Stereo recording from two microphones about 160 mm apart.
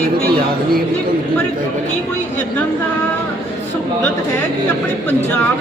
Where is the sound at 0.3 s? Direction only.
65° right (ahead or behind).